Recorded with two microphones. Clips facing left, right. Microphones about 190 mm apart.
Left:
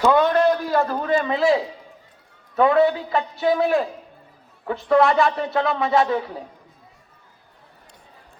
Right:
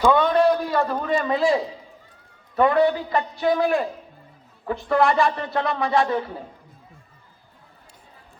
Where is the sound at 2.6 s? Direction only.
Centre (ahead or behind).